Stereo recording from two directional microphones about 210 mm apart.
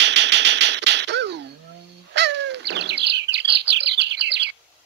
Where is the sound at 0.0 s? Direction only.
55° right (ahead or behind).